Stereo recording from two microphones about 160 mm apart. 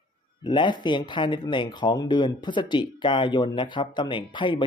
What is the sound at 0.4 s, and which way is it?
Speech, 30° left (ahead or behind).